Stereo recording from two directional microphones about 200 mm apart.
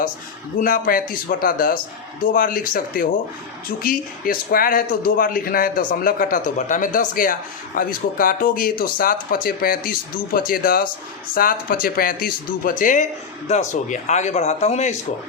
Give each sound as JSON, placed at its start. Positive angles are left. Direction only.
{"t": 0.6, "sound": "speech", "side_deg": 45}